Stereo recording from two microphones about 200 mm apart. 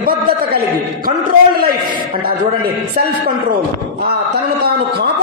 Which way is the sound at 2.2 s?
50° right (ahead or behind).